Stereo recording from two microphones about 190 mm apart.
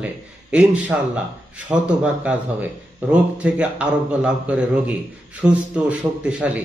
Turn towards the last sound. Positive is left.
turn(degrees=-5)  # may be behind; listen again after turning